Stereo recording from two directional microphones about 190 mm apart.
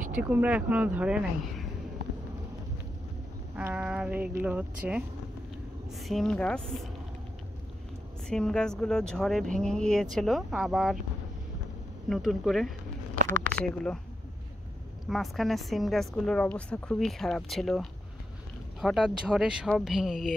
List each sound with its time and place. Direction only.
0.2 s speech: 10° right (ahead or behind)
3.5 s speech: 5° right (ahead or behind)
8.3 s speech: 5° left (ahead or behind)
12.1 s speech: centre (ahead or behind)
13.2 s speech: 45° right (ahead or behind)
15.0 s speech: centre (ahead or behind)